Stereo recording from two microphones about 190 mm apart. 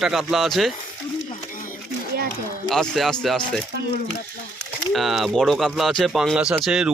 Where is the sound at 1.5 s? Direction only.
45° left (ahead or behind).